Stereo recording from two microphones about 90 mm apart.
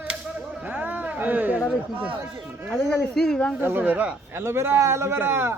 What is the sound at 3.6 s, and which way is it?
A man's voice, 20° right (ahead or behind).